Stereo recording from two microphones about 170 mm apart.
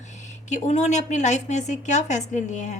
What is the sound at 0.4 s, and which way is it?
Speech, 45° left (ahead or behind).